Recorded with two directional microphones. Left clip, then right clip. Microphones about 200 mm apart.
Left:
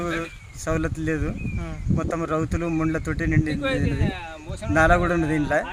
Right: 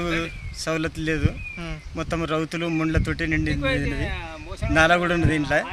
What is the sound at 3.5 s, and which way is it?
Speech, 35° left (ahead or behind).